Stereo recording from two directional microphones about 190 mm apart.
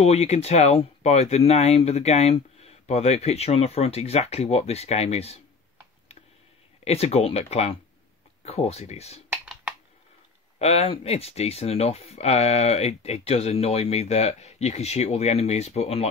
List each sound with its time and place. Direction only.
0.0 s speech: 35° left (ahead or behind)
6.8 s speech: 35° left (ahead or behind)
10.6 s speech: 35° left (ahead or behind)